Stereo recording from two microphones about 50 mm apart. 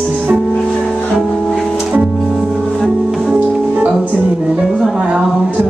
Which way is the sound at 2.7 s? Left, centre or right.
Centre.